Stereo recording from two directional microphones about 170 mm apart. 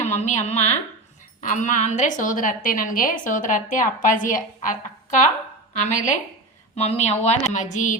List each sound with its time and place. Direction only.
0.0 s a woman's voice: 45° left (ahead or behind)